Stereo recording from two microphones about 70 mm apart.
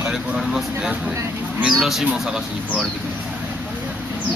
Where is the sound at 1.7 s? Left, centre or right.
Centre.